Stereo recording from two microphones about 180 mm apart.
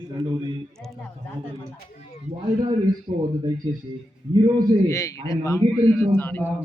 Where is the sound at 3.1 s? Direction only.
25° right (ahead or behind).